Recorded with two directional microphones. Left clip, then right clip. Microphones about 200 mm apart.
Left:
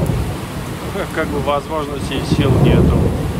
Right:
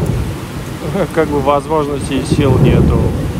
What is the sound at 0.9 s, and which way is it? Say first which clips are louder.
Speech: right 7 dB; centre (ahead or behind).